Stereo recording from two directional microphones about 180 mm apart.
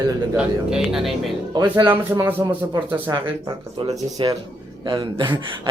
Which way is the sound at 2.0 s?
10° right (ahead or behind).